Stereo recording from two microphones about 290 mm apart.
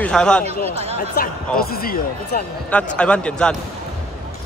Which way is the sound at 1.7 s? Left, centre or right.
Left.